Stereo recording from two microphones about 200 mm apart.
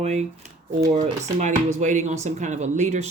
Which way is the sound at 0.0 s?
35° right (ahead or behind).